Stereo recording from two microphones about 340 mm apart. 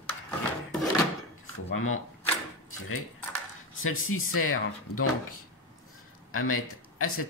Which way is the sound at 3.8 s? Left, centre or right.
Left.